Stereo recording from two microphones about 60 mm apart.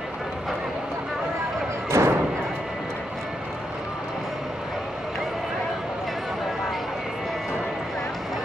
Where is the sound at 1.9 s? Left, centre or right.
Right.